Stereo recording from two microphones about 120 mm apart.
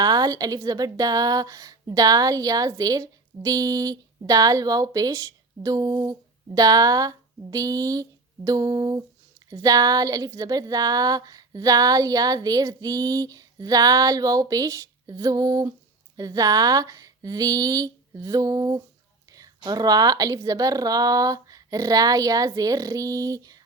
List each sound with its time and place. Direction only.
0.0 s a woman's voice: 35° right (ahead or behind)